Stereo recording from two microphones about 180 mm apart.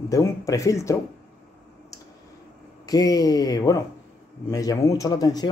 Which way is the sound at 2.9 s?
20° left (ahead or behind).